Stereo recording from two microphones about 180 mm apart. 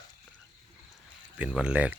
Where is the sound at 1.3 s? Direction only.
5° right (ahead or behind).